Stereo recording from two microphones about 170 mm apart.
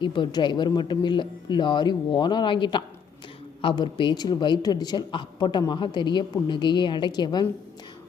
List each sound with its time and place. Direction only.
0.0 s a woman's voice: 30° left (ahead or behind)